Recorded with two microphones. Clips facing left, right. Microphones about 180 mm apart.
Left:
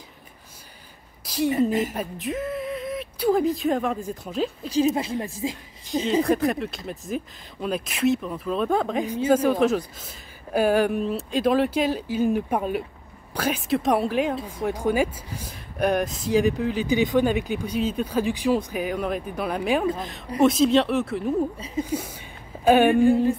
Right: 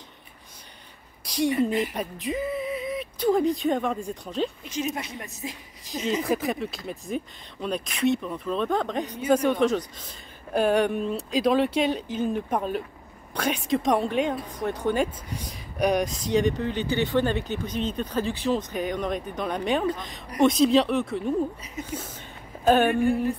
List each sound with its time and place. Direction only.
1.2 s a woman's voice: 5° left (ahead or behind)
4.6 s a woman's voice: 30° left (ahead or behind)
6.2 s a woman's voice: centre (ahead or behind)
21.8 s a woman's voice: 30° left (ahead or behind)
22.7 s speech: 15° left (ahead or behind)